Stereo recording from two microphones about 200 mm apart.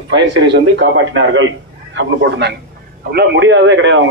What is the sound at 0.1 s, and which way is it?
A man's voice, 60° right (ahead or behind).